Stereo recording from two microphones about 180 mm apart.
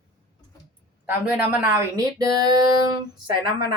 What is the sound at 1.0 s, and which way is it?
A man's voice, 10° right (ahead or behind).